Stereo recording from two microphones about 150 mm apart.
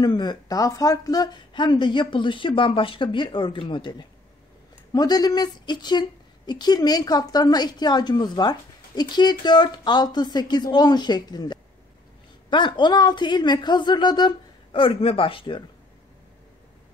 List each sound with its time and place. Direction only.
0.0 s speech: 30° left (ahead or behind)
4.9 s speech: 25° left (ahead or behind)